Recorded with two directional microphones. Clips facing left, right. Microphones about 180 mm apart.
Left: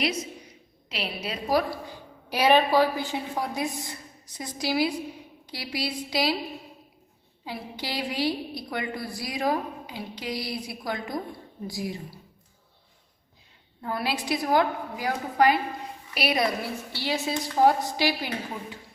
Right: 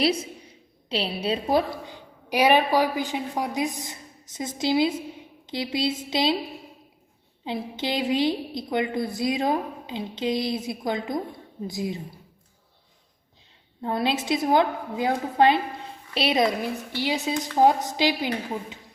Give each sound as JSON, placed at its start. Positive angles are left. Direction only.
{"t": 0.0, "sound": "a woman's voice", "side_deg": -30}
{"t": 7.4, "sound": "a woman's voice", "side_deg": -20}
{"t": 13.8, "sound": "a woman's voice", "side_deg": -20}